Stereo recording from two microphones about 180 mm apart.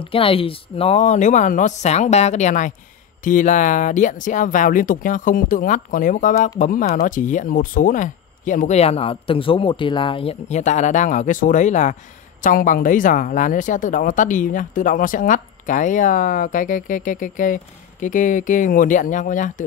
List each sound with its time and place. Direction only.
0.0 s speech: 30° left (ahead or behind); by 19.6 s 45° left (ahead or behind)